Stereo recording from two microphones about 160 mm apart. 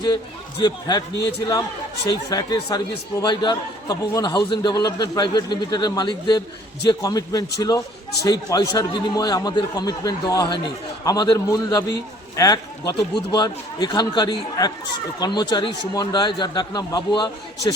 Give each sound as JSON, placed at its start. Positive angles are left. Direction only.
{"t": 0.6, "sound": "speech", "side_deg": 25}